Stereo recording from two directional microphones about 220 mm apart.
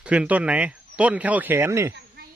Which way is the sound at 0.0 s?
5° right (ahead or behind).